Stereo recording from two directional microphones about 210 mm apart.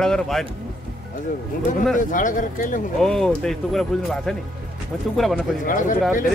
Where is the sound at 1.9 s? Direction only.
40° left (ahead or behind).